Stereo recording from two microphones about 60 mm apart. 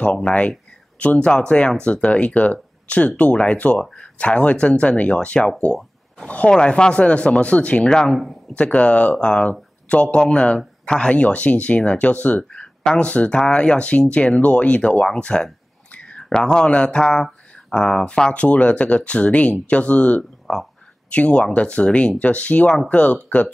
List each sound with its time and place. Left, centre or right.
0.0 s speech: left
20.5 s speech: centre
21.1 s speech: centre